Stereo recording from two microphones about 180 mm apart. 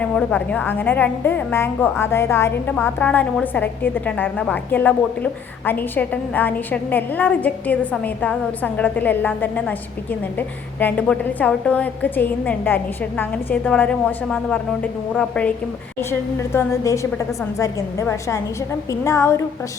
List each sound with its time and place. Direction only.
0.0 s a woman's voice: 5° left (ahead or behind)